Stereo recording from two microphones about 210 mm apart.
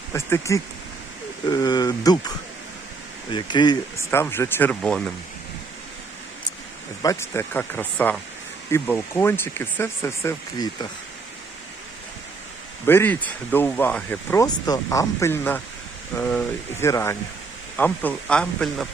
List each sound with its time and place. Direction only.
0.1 s speech: 15° left (ahead or behind)
3.3 s speech: 20° left (ahead or behind); by 5.1 s 5° left (ahead or behind)
7.0 s speech: 15° left (ahead or behind)
12.8 s speech: 10° left (ahead or behind)